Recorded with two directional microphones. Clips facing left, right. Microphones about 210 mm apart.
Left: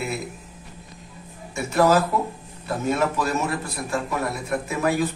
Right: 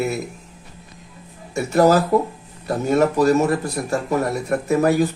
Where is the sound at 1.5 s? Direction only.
40° right (ahead or behind).